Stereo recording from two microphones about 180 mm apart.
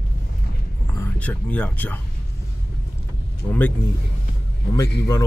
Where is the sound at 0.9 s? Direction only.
10° left (ahead or behind).